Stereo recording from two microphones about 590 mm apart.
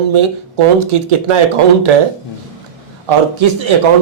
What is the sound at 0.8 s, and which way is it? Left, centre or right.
Speech, right.